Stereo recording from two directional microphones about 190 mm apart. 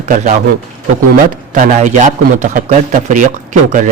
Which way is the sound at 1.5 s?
40° right (ahead or behind).